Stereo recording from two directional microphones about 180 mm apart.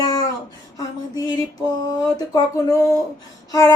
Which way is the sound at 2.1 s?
20° left (ahead or behind).